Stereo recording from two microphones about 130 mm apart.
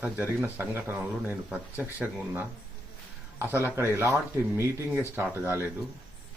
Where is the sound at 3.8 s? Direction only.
20° right (ahead or behind).